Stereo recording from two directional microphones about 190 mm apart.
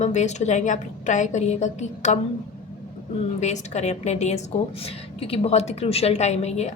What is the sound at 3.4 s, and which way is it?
A woman's voice, 35° left (ahead or behind).